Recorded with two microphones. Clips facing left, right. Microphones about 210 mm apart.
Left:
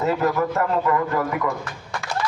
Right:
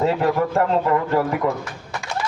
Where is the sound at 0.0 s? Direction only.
30° right (ahead or behind).